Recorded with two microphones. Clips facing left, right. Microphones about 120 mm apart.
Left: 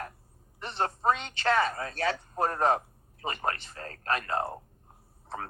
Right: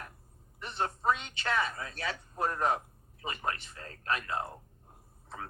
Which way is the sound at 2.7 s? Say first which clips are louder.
Left 5 dB; 45° left (ahead or behind).